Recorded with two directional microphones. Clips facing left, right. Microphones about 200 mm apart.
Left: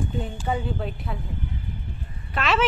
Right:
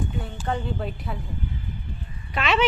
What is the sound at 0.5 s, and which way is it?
Speech, 5° left (ahead or behind).